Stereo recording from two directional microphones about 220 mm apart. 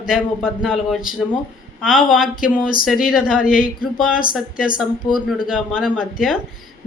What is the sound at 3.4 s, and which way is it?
Speech, 40° left (ahead or behind).